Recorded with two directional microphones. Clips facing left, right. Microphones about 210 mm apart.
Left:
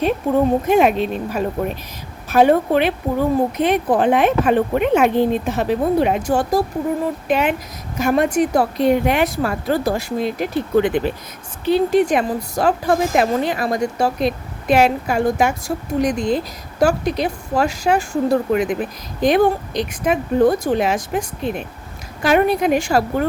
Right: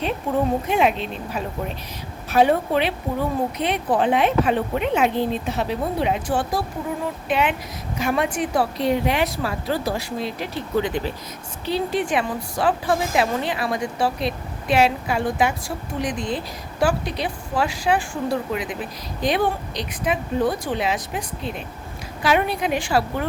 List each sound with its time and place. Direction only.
0.7 s a woman's voice: 50° left (ahead or behind)
11.7 s a woman's voice: 45° left (ahead or behind)